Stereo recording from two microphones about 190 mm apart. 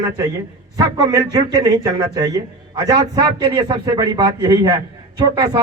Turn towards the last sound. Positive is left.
turn(degrees=-20)  # may be behind; listen again after turning